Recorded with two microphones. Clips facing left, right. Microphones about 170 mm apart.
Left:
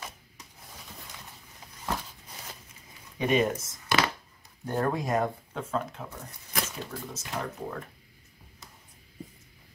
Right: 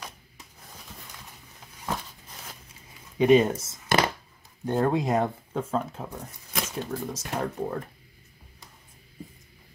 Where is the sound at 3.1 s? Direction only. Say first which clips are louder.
Right 6 dB; 25° right (ahead or behind).